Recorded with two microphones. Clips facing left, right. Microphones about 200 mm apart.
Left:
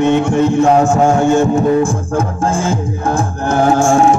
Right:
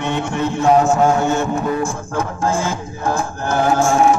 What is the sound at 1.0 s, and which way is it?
Music, 30° left (ahead or behind).